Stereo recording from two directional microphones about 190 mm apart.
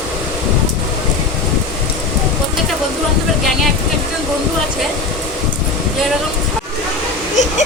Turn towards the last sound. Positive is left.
turn(degrees=40)  # may be behind; listen again after turning